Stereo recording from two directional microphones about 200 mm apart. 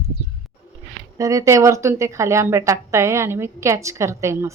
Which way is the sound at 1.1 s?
15° right (ahead or behind).